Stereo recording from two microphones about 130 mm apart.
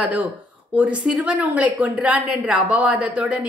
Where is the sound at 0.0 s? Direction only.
10° right (ahead or behind).